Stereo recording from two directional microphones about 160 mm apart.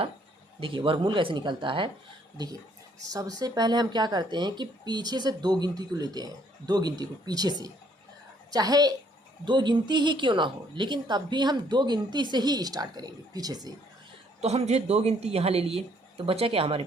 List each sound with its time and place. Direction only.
0.6 s speech: 30° right (ahead or behind)
14.4 s speech: 40° right (ahead or behind)